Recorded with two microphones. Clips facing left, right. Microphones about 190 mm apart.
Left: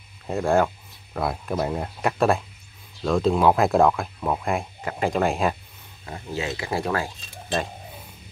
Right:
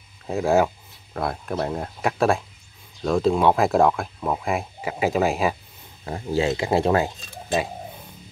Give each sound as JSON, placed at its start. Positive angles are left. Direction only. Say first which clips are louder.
{"t": 0.3, "sound": "speech", "louder": "right 1 dB", "side_deg": -5}
{"t": 6.0, "sound": "speech", "louder": "right 7 dB", "side_deg": -35}